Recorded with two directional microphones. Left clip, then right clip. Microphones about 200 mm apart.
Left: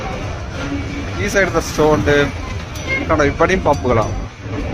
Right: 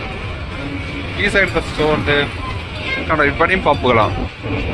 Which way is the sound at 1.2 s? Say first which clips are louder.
Right 1 dB; 25° left (ahead or behind).